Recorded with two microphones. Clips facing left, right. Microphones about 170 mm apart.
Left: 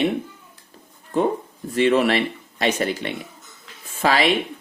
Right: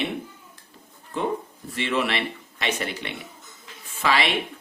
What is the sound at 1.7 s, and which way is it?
Speech, 45° left (ahead or behind).